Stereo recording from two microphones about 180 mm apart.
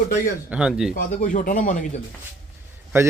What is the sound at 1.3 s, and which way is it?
Speech, 45° left (ahead or behind).